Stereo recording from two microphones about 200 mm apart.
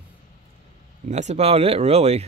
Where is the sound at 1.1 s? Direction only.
35° right (ahead or behind).